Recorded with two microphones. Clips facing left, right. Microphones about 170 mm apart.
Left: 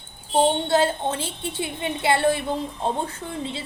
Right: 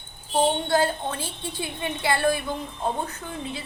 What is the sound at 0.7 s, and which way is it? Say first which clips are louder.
Speech: left 2 dB; 25° left (ahead or behind).